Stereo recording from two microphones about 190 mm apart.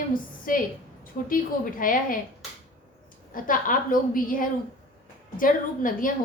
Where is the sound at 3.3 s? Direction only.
45° left (ahead or behind).